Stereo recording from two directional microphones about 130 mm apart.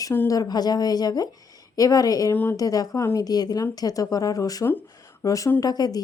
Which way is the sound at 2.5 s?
30° left (ahead or behind).